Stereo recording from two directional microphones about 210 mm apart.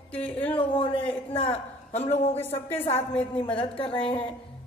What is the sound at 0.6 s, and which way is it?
A woman's voice, 25° left (ahead or behind).